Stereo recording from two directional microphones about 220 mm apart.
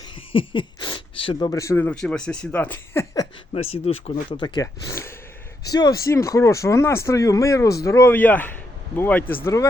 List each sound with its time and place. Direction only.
0.3 s speech: 20° left (ahead or behind)
3.5 s speech: 25° left (ahead or behind)